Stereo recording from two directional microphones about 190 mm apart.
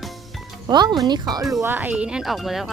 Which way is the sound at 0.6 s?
20° right (ahead or behind).